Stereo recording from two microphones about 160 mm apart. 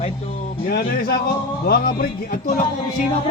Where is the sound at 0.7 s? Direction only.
75° left (ahead or behind).